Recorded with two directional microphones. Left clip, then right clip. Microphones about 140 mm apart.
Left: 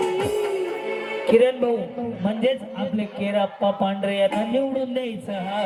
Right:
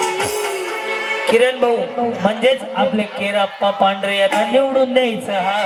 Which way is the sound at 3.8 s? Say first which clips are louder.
Right 6 dB; 20° right (ahead or behind).